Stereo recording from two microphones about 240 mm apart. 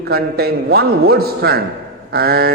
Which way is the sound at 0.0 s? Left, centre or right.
Right.